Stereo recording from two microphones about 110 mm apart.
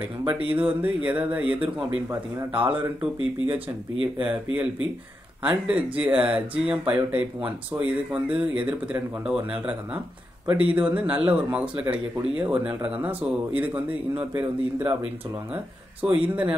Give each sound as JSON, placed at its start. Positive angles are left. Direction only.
{"t": 0.3, "sound": "speech", "side_deg": -10}
{"t": 16.2, "sound": "speech", "side_deg": -10}